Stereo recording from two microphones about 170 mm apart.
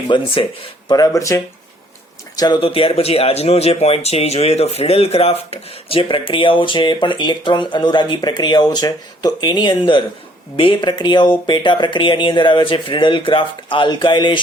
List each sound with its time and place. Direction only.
0.1 s speech: 30° left (ahead or behind)